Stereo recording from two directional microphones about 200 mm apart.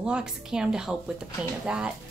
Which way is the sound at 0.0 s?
5° right (ahead or behind).